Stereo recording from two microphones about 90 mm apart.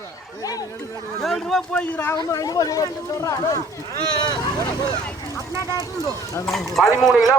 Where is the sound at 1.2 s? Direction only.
5° left (ahead or behind).